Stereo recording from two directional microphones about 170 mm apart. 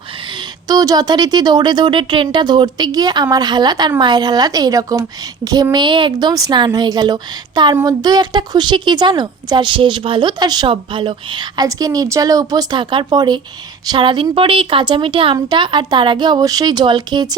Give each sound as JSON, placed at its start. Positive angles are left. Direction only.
{"t": 0.7, "sound": "a woman's voice", "side_deg": -20}